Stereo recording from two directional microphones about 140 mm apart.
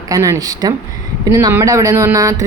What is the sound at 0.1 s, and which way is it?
Speech, 25° right (ahead or behind).